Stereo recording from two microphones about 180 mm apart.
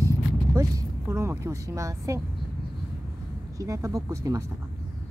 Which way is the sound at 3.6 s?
20° right (ahead or behind).